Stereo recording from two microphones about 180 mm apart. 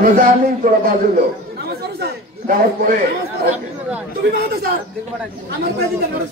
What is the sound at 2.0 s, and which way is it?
A man's voice, 55° right (ahead or behind).